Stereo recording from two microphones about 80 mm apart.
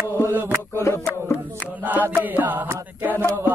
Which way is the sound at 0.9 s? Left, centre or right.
Left.